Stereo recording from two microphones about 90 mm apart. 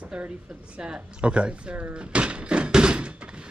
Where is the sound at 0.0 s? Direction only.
15° right (ahead or behind).